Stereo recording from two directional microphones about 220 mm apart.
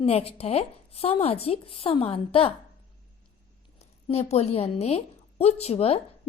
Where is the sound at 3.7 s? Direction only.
30° left (ahead or behind).